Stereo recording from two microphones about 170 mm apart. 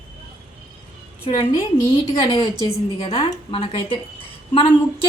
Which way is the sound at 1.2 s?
25° left (ahead or behind).